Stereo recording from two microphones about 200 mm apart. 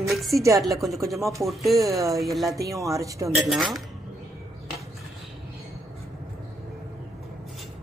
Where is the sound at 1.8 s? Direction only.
15° right (ahead or behind).